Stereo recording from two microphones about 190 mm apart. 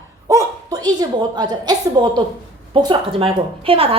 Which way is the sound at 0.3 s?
15° right (ahead or behind).